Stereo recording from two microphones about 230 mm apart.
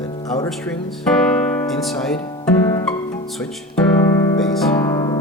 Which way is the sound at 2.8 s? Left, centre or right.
Centre.